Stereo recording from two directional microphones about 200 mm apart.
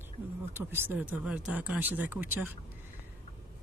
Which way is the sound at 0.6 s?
10° right (ahead or behind).